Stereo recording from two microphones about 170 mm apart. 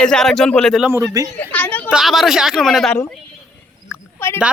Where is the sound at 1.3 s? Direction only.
10° left (ahead or behind).